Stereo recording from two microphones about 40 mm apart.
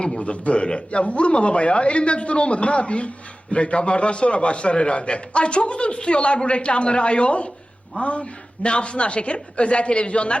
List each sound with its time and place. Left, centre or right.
0.0 s a man's voice: left